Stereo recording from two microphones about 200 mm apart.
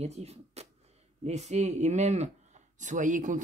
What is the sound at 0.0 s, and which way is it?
Speech, 30° right (ahead or behind).